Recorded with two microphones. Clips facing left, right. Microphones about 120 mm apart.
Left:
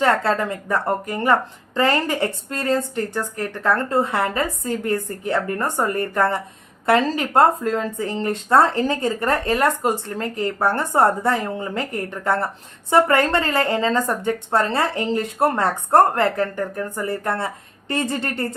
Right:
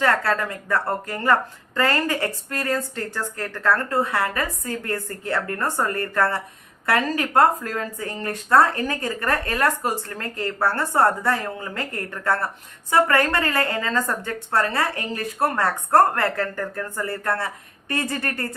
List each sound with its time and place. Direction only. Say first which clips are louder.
0.0 s speech: left 3 dB; 25° left (ahead or behind)